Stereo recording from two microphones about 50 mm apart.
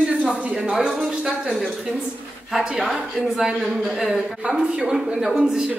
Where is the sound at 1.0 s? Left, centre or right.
Centre.